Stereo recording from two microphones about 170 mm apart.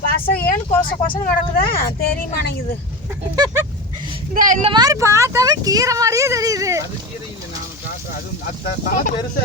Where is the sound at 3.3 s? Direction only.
20° right (ahead or behind).